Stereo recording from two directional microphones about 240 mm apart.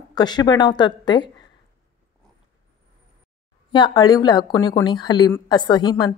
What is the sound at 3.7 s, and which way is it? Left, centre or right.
Speech, centre.